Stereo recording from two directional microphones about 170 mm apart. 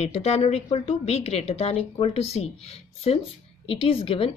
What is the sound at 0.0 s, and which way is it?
Speech, 40° left (ahead or behind).